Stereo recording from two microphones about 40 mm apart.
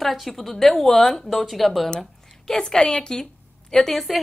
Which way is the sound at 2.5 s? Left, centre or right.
Centre.